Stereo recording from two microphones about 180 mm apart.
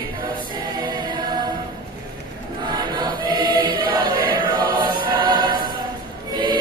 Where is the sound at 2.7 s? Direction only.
25° right (ahead or behind).